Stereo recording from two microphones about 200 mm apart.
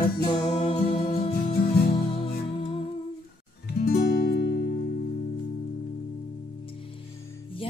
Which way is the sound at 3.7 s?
50° left (ahead or behind).